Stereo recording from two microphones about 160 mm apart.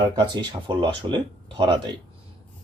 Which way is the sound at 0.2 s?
30° right (ahead or behind).